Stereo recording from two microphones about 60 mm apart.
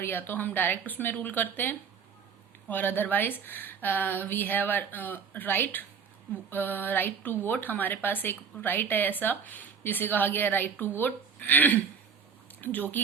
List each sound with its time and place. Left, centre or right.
0.0 s a woman's voice: left